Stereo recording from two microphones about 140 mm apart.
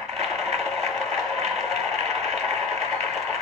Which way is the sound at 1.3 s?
50° right (ahead or behind).